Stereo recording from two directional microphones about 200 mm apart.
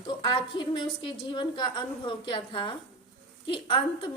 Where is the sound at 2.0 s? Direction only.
25° left (ahead or behind).